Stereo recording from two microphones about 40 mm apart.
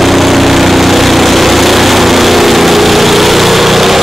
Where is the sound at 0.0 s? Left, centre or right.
Centre.